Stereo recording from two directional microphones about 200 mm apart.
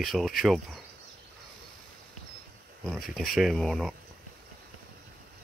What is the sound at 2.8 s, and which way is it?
Speech, centre (ahead or behind).